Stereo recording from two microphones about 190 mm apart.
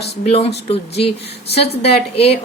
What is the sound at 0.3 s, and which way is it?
Speech, 30° left (ahead or behind).